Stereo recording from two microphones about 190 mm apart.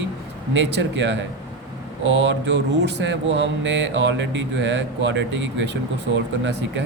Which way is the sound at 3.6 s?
70° right (ahead or behind).